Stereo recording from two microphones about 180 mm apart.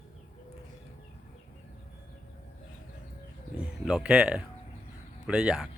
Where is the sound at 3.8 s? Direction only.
5° right (ahead or behind).